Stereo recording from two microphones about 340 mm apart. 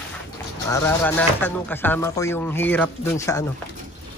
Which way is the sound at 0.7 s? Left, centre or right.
Centre.